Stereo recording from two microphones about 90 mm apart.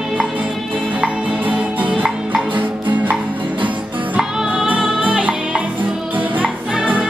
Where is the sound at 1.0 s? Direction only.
15° right (ahead or behind).